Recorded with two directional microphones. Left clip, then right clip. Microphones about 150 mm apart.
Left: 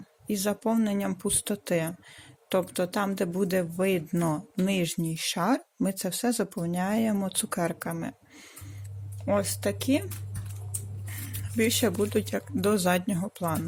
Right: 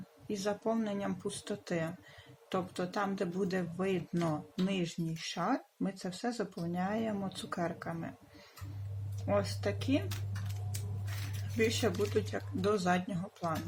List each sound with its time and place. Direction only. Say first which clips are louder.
0.3 s speech: left 6 dB; 75° left (ahead or behind); by 8.1 s 90° left
9.2 s speech: left 6 dB; 70° left (ahead or behind)
11.5 s speech: left 6 dB; 70° left (ahead or behind)